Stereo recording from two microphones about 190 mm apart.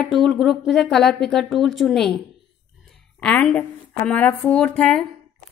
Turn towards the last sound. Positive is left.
turn(degrees=5)  # may be behind; listen again after turning